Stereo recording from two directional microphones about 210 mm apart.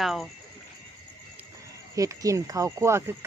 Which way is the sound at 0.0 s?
Centre (ahead or behind).